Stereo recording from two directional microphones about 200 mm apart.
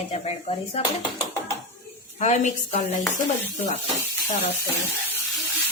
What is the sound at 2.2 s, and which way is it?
Speech, 35° left (ahead or behind).